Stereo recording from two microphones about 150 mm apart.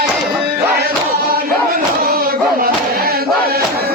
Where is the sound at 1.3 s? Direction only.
75° right (ahead or behind).